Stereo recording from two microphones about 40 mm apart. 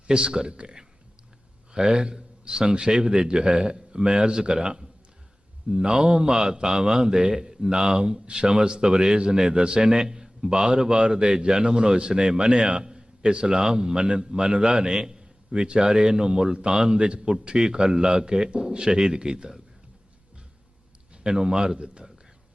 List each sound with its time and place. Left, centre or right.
0.1 s a man's voice: centre
21.2 s speech: centre